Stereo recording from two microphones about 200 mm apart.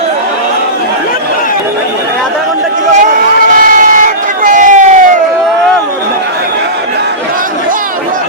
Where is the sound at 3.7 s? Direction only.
40° right (ahead or behind).